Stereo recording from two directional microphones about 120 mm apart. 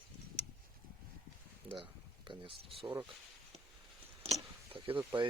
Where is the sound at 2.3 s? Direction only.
45° right (ahead or behind).